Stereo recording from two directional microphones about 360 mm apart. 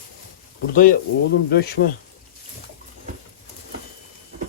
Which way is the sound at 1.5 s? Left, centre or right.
Left.